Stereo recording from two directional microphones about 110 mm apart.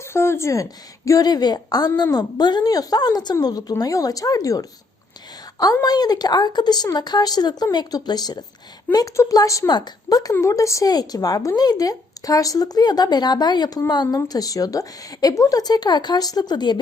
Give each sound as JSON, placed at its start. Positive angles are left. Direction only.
{"t": 0.0, "sound": "a woman's voice", "side_deg": 25}
{"t": 5.8, "sound": "speech", "side_deg": 35}